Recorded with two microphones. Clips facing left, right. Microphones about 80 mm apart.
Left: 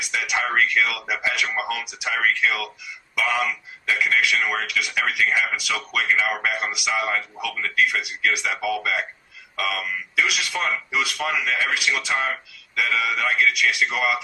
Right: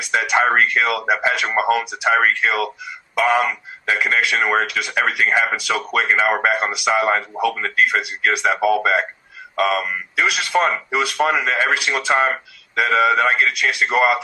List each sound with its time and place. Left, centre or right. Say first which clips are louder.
0.0 s speech: right 8 dB; right